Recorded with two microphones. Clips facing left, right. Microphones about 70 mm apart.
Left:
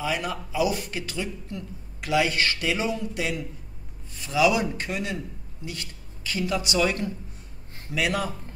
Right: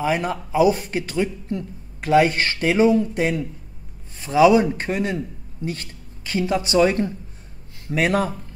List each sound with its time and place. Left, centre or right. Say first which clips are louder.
0.0 s speech: right 6 dB; right